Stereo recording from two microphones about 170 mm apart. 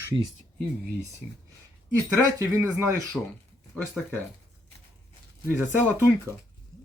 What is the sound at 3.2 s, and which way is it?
Speech, 5° left (ahead or behind).